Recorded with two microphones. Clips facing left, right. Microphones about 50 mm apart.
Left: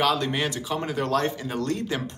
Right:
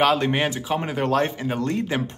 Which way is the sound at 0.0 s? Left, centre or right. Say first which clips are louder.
Right 4 dB; right.